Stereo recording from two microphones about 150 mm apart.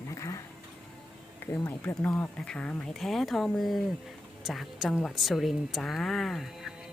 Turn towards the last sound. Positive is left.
turn(degrees=0)  # may be behind; listen again after turning